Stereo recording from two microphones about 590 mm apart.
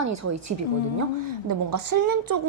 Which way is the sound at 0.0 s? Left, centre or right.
Right.